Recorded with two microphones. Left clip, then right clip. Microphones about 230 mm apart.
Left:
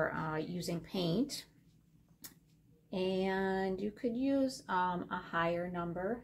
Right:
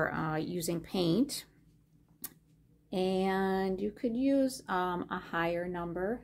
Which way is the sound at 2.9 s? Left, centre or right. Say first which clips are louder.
Right 4 dB; right.